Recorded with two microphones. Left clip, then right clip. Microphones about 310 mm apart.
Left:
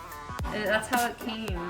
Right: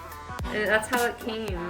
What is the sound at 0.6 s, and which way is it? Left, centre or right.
Music, centre.